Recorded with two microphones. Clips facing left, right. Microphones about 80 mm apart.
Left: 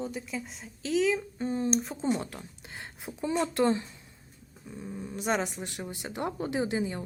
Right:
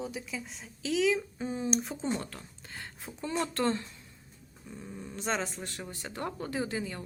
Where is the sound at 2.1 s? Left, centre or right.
Centre.